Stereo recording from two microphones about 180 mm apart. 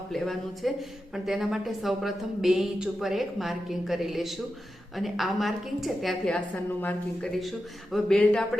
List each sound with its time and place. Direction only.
0.1 s a woman's voice: centre (ahead or behind)